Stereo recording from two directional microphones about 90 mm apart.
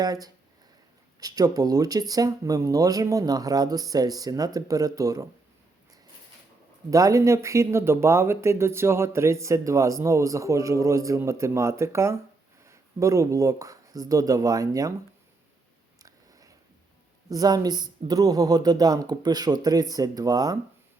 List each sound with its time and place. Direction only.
0.0 s speech: 45° right (ahead or behind)
6.9 s speech: 35° right (ahead or behind)
16.0 s biting: 40° right (ahead or behind)
17.2 s speech: 45° right (ahead or behind)